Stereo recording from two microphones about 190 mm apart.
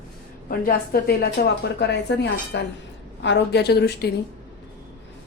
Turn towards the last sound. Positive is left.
turn(degrees=60)  # may be behind; listen again after turning